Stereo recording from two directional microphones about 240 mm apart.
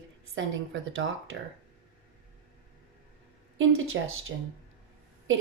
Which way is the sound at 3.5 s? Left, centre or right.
Right.